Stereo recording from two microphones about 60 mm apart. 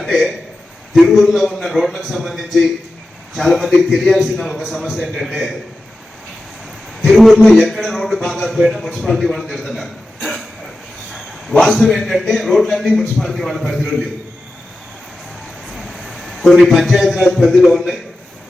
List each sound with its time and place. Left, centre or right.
0.0 s a man's voice: centre
7.1 s a man's voice: centre
10.2 s throat clearing: centre
11.1 s a sound: centre
11.6 s a man's voice: centre
15.6 s a sound: centre
16.7 s a man's voice: centre